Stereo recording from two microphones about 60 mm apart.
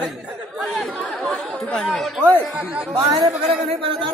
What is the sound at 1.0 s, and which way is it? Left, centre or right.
Speech, centre.